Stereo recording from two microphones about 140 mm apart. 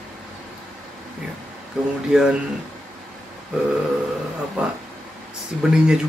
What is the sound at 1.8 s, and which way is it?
Speech, 5° right (ahead or behind).